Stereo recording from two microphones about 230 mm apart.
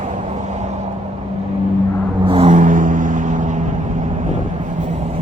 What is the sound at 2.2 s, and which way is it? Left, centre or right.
Vehicle, right.